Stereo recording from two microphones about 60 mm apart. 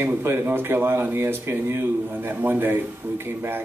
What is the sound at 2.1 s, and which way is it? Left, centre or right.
Speech, right.